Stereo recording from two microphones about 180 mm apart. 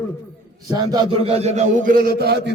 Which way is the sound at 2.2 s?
65° right (ahead or behind).